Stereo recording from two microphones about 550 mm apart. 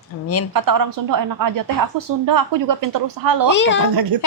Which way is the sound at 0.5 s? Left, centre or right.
Right.